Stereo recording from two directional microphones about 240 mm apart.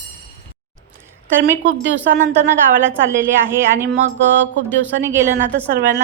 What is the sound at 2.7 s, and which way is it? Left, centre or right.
A woman's voice, centre.